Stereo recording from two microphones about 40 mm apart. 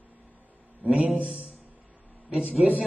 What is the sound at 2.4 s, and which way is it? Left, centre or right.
Speech, right.